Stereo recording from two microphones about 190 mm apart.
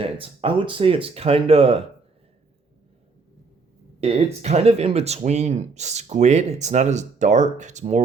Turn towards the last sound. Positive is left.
turn(degrees=-35)  # may be behind; listen again after turning